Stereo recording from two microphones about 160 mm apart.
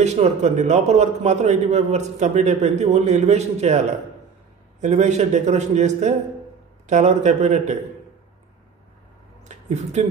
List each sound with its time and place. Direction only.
0.0 s a man's voice: 45° right (ahead or behind)
4.8 s a man's voice: 45° right (ahead or behind)
9.4 s a sound: 45° right (ahead or behind)